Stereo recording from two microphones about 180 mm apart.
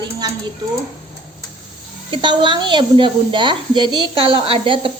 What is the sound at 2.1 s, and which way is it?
A woman's voice, 25° right (ahead or behind).